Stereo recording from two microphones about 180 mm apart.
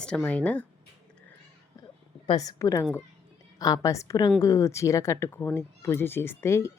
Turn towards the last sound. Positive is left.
turn(degrees=15)  # may be behind; listen again after turning